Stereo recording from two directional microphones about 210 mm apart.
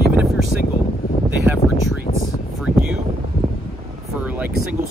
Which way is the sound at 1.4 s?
10° right (ahead or behind).